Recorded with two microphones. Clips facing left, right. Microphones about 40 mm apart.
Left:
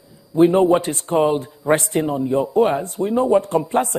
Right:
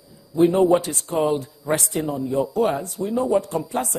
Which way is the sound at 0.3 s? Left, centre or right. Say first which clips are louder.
Left 3 dB; left.